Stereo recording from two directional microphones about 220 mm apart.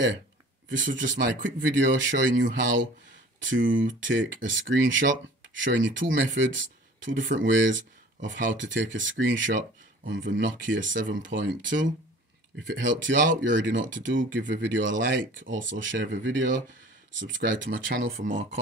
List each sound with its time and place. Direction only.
0.7 s speech: 55° right (ahead or behind)
18.1 s speech: 35° right (ahead or behind)